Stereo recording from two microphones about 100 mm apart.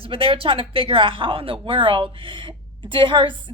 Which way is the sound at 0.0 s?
65° right (ahead or behind).